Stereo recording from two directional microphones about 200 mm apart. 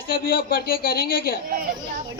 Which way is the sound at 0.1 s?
45° left (ahead or behind).